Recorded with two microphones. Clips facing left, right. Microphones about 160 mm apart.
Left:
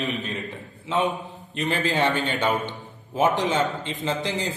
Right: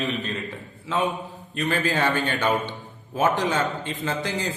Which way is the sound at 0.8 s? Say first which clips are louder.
Left 1 dB; 20° left (ahead or behind).